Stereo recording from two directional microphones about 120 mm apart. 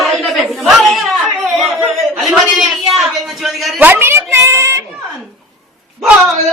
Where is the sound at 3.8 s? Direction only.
15° right (ahead or behind).